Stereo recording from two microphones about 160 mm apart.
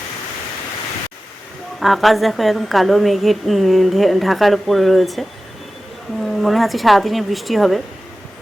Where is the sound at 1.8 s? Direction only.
Centre (ahead or behind).